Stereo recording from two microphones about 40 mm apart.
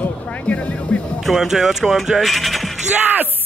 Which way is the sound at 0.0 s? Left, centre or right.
Left.